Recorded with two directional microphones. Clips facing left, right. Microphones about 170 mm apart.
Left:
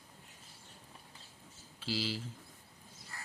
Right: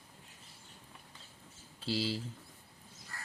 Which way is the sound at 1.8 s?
30° right (ahead or behind).